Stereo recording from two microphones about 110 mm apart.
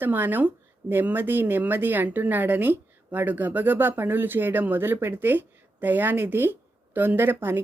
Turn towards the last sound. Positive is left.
turn(degrees=-20)  # may be behind; listen again after turning